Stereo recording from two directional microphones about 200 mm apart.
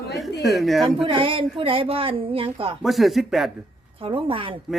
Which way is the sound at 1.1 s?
25° right (ahead or behind).